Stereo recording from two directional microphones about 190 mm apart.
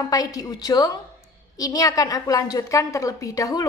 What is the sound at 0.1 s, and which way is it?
A woman's voice, 20° left (ahead or behind).